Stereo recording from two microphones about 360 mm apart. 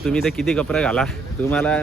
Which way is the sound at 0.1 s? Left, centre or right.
Centre.